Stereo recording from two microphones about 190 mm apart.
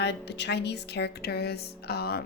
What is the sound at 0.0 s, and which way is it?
Speech, 65° left (ahead or behind).